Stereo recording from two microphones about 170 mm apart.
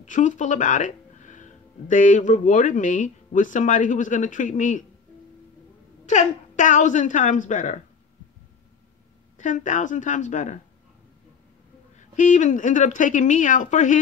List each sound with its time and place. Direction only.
0.0 s speech: 45° left (ahead or behind)
6.0 s speech: 45° left (ahead or behind)
9.4 s speech: 45° left (ahead or behind)
12.0 s speech: 50° left (ahead or behind)